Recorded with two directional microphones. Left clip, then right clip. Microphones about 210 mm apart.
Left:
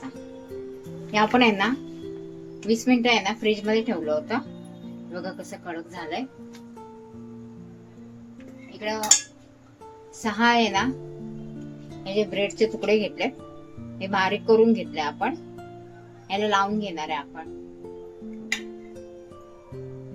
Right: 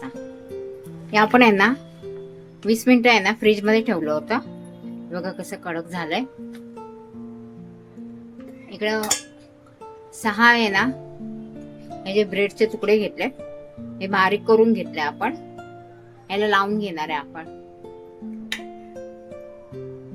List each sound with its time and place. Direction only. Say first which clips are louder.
1.1 s a woman's voice: right 5 dB; 25° right (ahead or behind); by 6.2 s 40° right (ahead or behind)
8.8 s dishes: right 6 dB; 50° right (ahead or behind)
10.2 s speech: right 5 dB; 20° right (ahead or behind)
12.0 s a woman's voice: right 4 dB; 25° right (ahead or behind)